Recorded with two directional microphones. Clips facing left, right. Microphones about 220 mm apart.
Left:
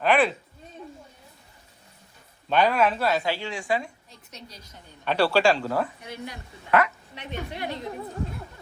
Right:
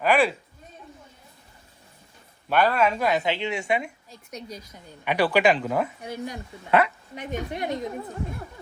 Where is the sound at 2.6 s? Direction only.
10° left (ahead or behind).